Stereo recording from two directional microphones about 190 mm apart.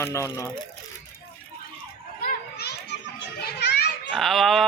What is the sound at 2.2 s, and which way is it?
Children playing, 60° left (ahead or behind).